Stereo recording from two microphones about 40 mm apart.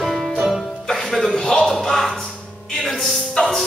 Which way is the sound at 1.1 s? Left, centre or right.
Centre.